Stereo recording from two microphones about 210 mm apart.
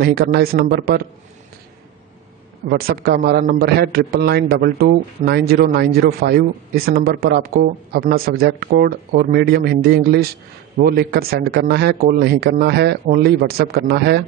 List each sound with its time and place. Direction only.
0.0 s a man's voice: 50° right (ahead or behind)
2.7 s a man's voice: 50° right (ahead or behind)